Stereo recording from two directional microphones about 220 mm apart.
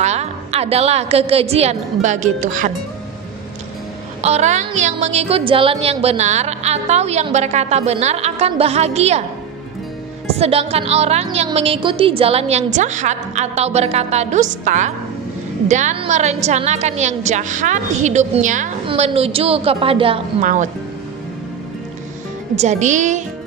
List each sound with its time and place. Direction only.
0.0 s a woman's voice: 30° right (ahead or behind)
4.2 s speech: 30° right (ahead or behind)
10.4 s a woman's voice: 25° right (ahead or behind)
22.6 s a woman's voice: 30° right (ahead or behind)